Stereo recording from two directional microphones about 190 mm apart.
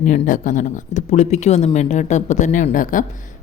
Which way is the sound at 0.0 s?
45° left (ahead or behind).